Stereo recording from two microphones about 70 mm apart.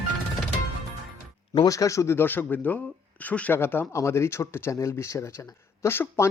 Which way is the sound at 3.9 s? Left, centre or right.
Left.